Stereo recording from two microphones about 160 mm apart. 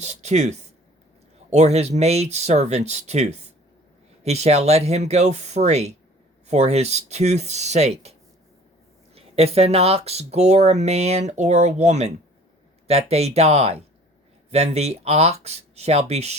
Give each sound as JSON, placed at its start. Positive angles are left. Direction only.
{"t": 0.0, "sound": "a sound", "side_deg": -45}
{"t": 1.5, "sound": "speech", "side_deg": -45}
{"t": 9.1, "sound": "speech", "side_deg": -40}